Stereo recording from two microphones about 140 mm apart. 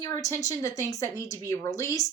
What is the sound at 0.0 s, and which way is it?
Speech, 25° left (ahead or behind).